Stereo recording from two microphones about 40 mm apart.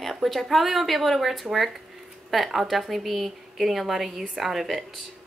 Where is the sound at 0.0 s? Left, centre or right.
Centre.